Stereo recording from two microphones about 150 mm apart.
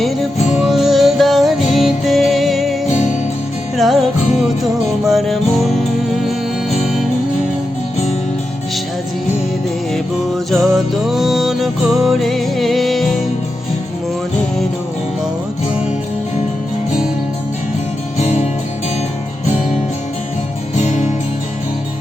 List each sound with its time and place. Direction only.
0.0 s music: 5° right (ahead or behind)
3.8 s music: centre (ahead or behind)
9.9 s music: centre (ahead or behind)
18.2 s music: 45° left (ahead or behind)
20.7 s music: 50° left (ahead or behind)